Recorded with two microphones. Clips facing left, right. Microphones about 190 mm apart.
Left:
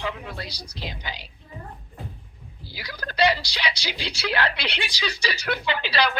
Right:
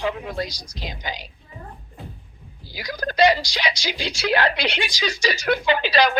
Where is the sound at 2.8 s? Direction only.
45° right (ahead or behind).